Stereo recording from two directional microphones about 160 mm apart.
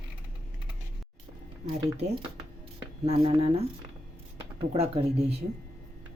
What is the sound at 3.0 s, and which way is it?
Speech, 35° right (ahead or behind).